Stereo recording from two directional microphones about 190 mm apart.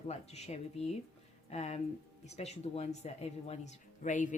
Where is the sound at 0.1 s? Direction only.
35° left (ahead or behind).